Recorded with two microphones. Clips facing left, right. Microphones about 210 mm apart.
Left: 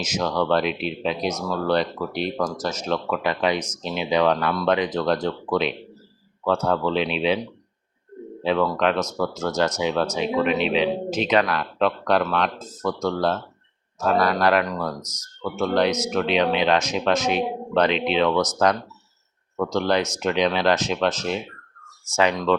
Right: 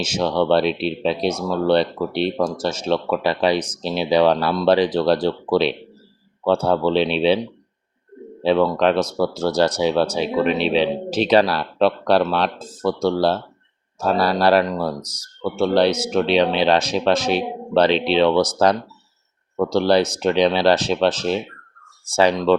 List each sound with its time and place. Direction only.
0.0 s speech: 30° right (ahead or behind)
8.4 s speech: 30° right (ahead or behind)